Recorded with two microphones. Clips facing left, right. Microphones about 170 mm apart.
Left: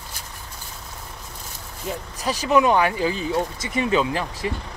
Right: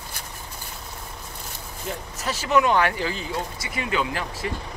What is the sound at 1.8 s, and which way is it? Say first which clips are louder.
Speech: left 3 dB; 15° left (ahead or behind).